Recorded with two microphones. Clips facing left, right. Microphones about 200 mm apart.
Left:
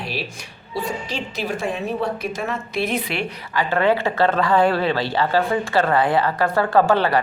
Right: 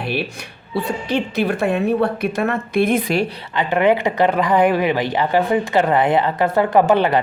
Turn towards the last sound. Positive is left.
turn(degrees=-20)  # may be behind; listen again after turning